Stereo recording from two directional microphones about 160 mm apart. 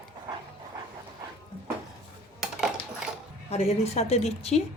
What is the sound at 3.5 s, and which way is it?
A woman's voice, 40° left (ahead or behind).